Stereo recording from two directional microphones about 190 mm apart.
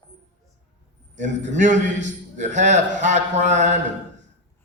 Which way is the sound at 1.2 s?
40° right (ahead or behind).